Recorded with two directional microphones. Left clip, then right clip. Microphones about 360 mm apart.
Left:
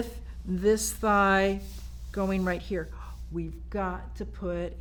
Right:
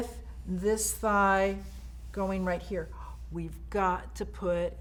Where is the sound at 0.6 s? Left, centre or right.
Left.